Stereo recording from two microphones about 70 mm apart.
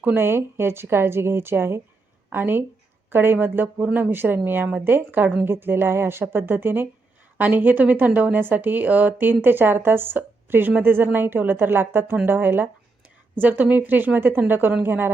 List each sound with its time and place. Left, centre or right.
0.0 s a woman's voice: right